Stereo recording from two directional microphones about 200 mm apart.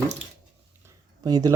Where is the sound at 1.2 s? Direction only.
20° right (ahead or behind).